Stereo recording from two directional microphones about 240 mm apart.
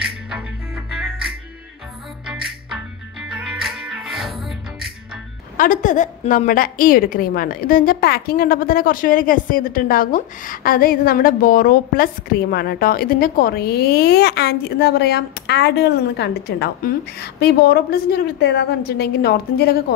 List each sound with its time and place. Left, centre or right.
0.3 s music: centre
2.2 s music: centre
5.6 s a woman's voice: left